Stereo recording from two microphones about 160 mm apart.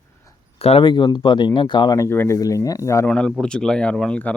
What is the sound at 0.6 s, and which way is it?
Speech, 35° left (ahead or behind).